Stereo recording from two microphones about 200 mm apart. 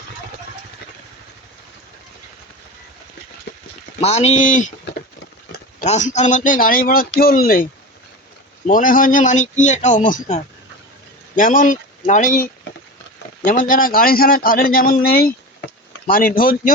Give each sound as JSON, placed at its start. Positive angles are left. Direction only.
{"t": 3.5, "sound": "clip-clop", "side_deg": 55}
{"t": 4.0, "sound": "speech", "side_deg": 35}
{"t": 5.8, "sound": "a man's voice", "side_deg": 35}